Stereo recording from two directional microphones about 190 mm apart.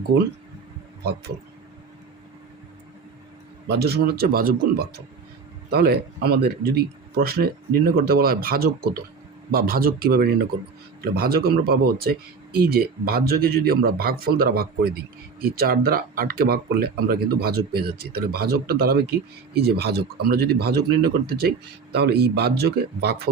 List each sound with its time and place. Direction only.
3.7 s speech: 55° right (ahead or behind)